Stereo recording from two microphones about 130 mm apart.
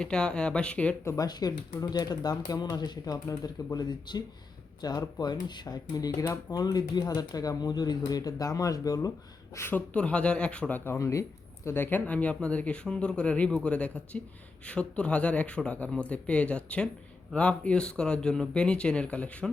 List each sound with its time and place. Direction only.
0.0 s speech: 5° left (ahead or behind)
1.0 s speech: 25° left (ahead or behind)
9.6 s speech: 15° left (ahead or behind)